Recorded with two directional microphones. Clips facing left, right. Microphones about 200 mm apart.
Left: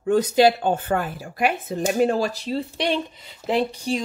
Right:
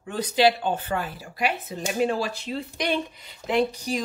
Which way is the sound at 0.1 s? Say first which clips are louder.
Left 5 dB; 45° left (ahead or behind).